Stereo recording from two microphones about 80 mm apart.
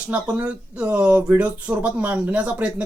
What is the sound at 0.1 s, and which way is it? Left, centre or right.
Speech, centre.